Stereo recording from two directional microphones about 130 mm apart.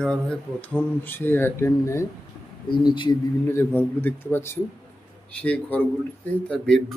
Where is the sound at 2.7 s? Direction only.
35° left (ahead or behind).